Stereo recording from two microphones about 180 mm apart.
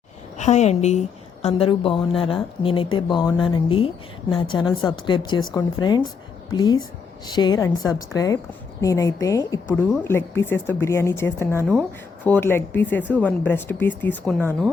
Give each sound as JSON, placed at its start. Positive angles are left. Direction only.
{"t": 0.3, "sound": "a woman's voice", "side_deg": 40}